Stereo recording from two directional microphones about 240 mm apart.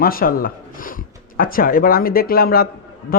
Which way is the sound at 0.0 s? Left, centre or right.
Left.